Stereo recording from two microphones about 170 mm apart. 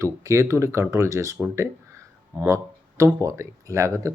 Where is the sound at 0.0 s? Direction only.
20° right (ahead or behind).